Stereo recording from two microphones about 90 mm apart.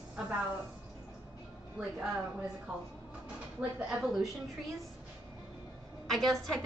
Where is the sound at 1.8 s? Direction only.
10° right (ahead or behind).